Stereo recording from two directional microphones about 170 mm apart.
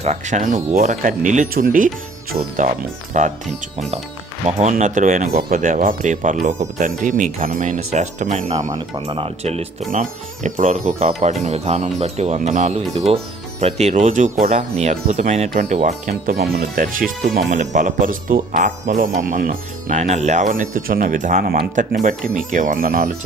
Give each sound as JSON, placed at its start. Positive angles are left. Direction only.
{"t": 0.0, "sound": "speech", "side_deg": -45}
{"t": 4.4, "sound": "speech", "side_deg": -40}
{"t": 8.7, "sound": "speech", "side_deg": -30}
{"t": 16.4, "sound": "speech", "side_deg": -60}